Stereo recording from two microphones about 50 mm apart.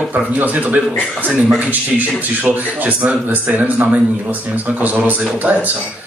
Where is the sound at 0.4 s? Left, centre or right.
Right.